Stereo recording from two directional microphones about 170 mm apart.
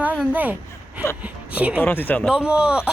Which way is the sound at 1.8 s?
10° left (ahead or behind).